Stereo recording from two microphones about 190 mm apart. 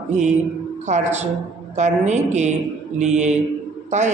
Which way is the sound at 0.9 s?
35° right (ahead or behind).